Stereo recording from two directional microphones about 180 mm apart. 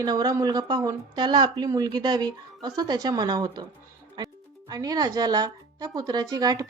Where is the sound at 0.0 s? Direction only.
20° right (ahead or behind).